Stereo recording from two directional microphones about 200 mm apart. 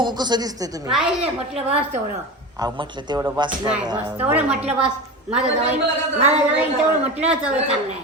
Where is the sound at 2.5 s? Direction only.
20° right (ahead or behind).